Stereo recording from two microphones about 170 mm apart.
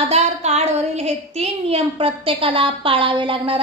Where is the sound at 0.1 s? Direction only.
40° right (ahead or behind).